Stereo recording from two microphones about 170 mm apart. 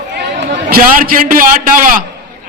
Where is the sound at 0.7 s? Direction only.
60° right (ahead or behind).